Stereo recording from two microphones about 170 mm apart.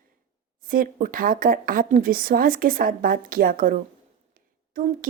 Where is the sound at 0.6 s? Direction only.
55° right (ahead or behind).